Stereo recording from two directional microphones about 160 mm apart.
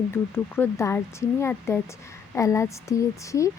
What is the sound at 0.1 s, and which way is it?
Speech, 15° left (ahead or behind).